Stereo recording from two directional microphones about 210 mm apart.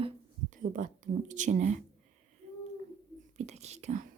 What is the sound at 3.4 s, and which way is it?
Whispering, 30° right (ahead or behind).